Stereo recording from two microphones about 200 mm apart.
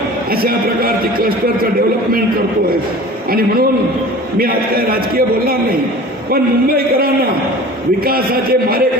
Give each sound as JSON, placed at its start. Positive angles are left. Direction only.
{"t": 0.4, "sound": "a man's voice", "side_deg": -45}
{"t": 4.4, "sound": "a man's voice", "side_deg": -50}